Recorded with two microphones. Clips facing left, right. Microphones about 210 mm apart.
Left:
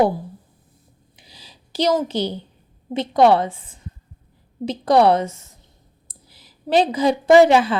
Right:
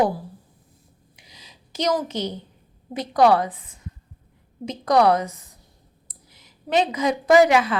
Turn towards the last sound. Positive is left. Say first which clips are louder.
# left 3 dB
turn(degrees=30)  # may be behind; listen again after turning